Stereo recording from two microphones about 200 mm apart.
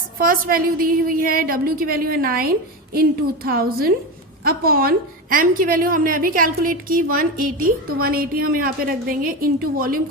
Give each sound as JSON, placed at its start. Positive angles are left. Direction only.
{"t": 0.2, "sound": "a woman's voice", "side_deg": -45}